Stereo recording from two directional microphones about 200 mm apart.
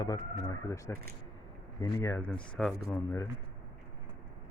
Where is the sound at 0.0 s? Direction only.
20° left (ahead or behind).